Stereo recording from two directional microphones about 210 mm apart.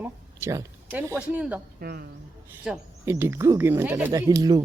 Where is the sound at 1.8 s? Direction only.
45° right (ahead or behind).